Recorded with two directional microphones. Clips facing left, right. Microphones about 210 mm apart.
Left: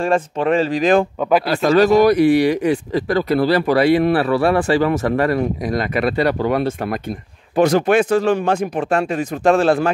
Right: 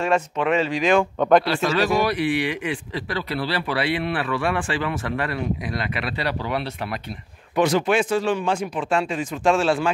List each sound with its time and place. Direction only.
0.1 s speech: 35° left (ahead or behind)
8.5 s a man's voice: 60° left (ahead or behind)